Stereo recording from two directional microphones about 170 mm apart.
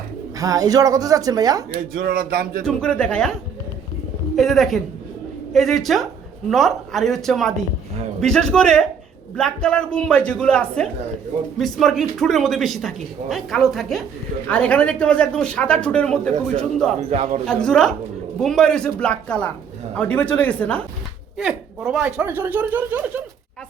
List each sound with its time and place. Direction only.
0.3 s speech: 20° right (ahead or behind)
1.7 s speech: 60° right (ahead or behind)
2.6 s speech: 5° left (ahead or behind)
4.4 s speech: centre (ahead or behind)
17.1 s speech: 40° right (ahead or behind)
17.4 s speech: 5° left (ahead or behind)
21.3 s speech: 5° right (ahead or behind)